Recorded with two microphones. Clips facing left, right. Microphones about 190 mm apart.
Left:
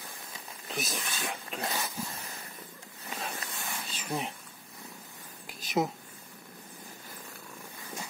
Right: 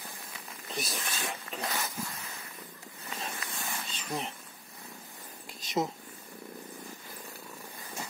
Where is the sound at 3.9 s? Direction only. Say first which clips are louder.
Left 2 dB; 5° left (ahead or behind).